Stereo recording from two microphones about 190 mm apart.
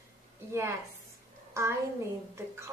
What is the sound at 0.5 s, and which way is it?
A woman's voice, 15° right (ahead or behind).